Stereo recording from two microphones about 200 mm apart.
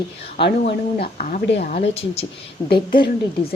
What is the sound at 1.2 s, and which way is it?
Speech, 40° left (ahead or behind).